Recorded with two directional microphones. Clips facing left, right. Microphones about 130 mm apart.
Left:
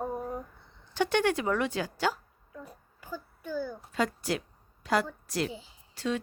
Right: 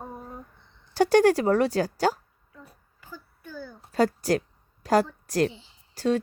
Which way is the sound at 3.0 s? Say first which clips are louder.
Left 4 dB; 10° left (ahead or behind).